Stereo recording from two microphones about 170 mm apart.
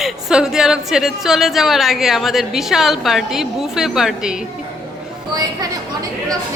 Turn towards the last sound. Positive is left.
turn(degrees=-20)  # may be behind; listen again after turning